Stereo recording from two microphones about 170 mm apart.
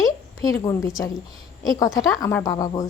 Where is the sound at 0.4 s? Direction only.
20° left (ahead or behind).